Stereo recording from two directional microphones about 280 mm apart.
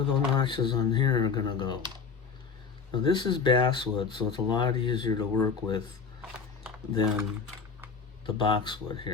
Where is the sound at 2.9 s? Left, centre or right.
Centre.